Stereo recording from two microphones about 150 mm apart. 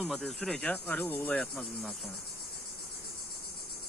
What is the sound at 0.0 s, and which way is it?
Speech, centre (ahead or behind).